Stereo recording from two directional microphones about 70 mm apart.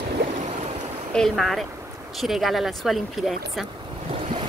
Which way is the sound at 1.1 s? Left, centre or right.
Centre.